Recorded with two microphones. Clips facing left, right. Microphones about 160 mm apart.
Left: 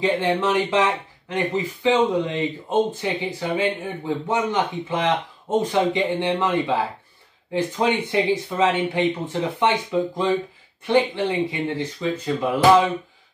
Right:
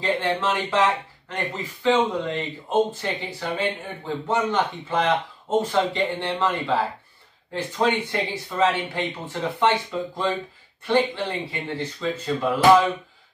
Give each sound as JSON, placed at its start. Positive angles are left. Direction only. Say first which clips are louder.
{"t": 0.0, "sound": "speech", "louder": "left 3 dB", "side_deg": 15}